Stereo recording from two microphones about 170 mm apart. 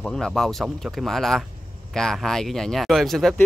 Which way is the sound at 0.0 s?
5° left (ahead or behind).